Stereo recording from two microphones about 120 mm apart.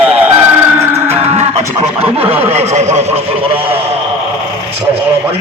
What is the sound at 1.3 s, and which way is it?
Music, 60° right (ahead or behind).